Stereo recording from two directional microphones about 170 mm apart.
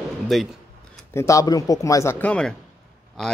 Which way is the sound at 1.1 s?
20° left (ahead or behind).